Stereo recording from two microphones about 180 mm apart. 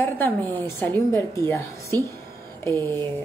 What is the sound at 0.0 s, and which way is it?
A woman's voice, 10° left (ahead or behind).